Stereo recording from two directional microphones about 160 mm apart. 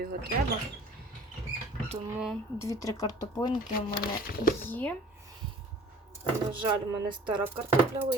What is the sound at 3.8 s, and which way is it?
Speech, 70° left (ahead or behind).